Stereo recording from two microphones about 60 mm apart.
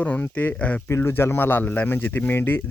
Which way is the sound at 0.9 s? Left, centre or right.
Left.